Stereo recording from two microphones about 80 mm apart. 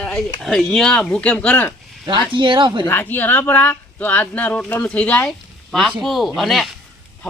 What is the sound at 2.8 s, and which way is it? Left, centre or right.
Speech, left.